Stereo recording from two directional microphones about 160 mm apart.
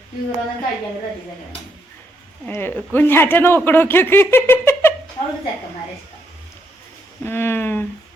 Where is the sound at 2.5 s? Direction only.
10° left (ahead or behind).